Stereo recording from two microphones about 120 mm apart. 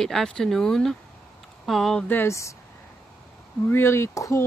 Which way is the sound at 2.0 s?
20° left (ahead or behind).